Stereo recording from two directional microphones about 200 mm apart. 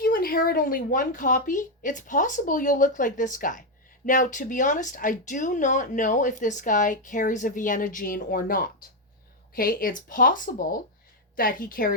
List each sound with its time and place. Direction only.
0.0 s speech: 45° left (ahead or behind)